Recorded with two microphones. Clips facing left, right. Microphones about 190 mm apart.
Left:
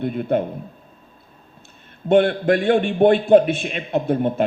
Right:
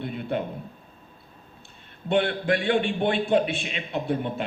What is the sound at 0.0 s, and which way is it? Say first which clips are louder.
Speech: left 8 dB; 45° left (ahead or behind).